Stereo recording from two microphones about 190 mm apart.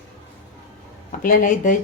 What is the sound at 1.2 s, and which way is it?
Speech, 45° left (ahead or behind).